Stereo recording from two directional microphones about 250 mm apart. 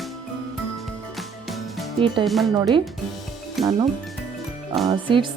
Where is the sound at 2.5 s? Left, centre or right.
Centre.